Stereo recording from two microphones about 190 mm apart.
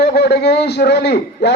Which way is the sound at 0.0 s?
60° left (ahead or behind).